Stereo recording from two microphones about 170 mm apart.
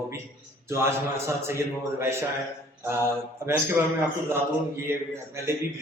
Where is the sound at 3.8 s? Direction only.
10° right (ahead or behind).